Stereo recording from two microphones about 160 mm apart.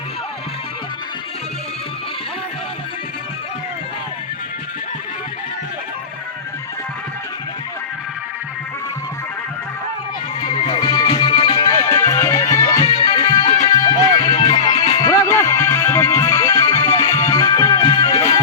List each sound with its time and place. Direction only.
10.4 s music: 35° left (ahead or behind)
12.8 s music: 35° left (ahead or behind)